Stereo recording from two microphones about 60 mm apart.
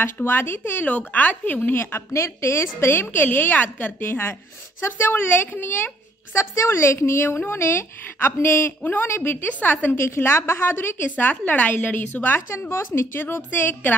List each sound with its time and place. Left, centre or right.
0.0 s a woman's voice: left
1.8 s a woman's voice: left
6.3 s a woman's voice: left
9.9 s a woman's voice: left
12.4 s a woman's voice: left